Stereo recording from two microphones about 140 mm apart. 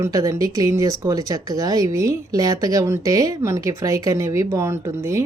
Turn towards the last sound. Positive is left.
turn(degrees=-20)  # may be behind; listen again after turning